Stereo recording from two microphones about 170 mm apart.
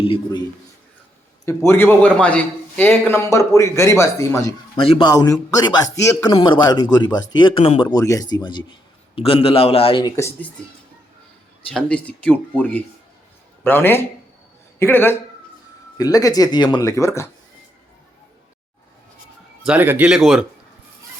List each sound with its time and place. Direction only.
1.5 s speech: 15° left (ahead or behind)
4.8 s speech: 30° left (ahead or behind)
6.3 s a man's voice: 30° left (ahead or behind)
10.2 s speech: 15° left (ahead or behind)
11.7 s speech: 5° left (ahead or behind); by 16.9 s 25° left (ahead or behind)
16.9 s speech: 15° left (ahead or behind)
19.6 s speech: 10° right (ahead or behind)